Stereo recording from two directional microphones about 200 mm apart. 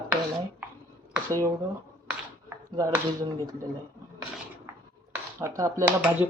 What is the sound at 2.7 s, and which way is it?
Speech, 15° right (ahead or behind).